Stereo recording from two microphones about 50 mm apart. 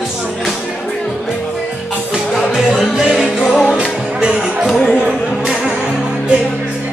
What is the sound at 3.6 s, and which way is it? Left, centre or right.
Music, left.